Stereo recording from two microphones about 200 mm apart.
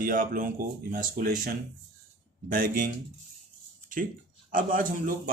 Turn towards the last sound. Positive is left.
turn(degrees=-45)  # may be behind; listen again after turning